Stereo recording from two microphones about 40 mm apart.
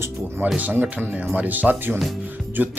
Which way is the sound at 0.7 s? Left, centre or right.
Right.